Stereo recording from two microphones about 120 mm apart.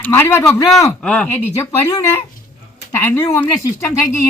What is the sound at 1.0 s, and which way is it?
Speech, 10° left (ahead or behind).